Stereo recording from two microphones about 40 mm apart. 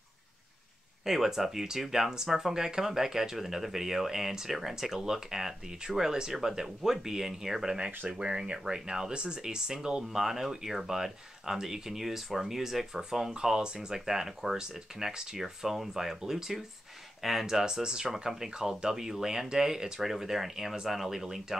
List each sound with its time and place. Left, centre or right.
1.0 s speech: centre; by 8.5 s right
8.6 s speech: centre
13.3 s speech: centre